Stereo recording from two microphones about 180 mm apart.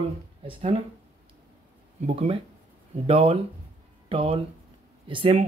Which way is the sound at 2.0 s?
35° right (ahead or behind).